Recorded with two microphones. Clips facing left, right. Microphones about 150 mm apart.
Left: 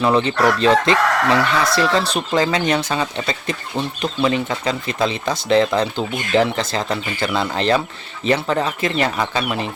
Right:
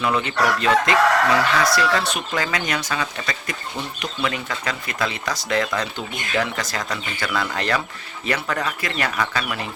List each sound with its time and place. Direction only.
0.0 s chicken: 30° left (ahead or behind)